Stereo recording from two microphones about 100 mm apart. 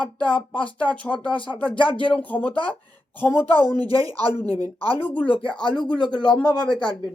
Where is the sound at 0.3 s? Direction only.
15° left (ahead or behind).